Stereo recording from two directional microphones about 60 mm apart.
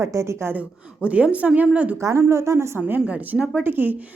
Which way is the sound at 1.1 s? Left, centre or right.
Right.